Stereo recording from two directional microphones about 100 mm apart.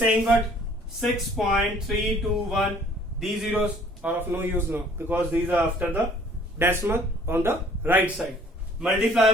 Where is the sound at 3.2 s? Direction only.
15° right (ahead or behind).